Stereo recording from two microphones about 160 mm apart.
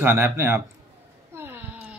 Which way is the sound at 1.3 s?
15° right (ahead or behind).